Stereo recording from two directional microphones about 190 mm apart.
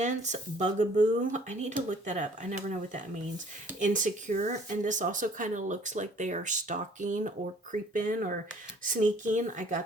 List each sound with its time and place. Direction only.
0.0 s speech: 40° right (ahead or behind)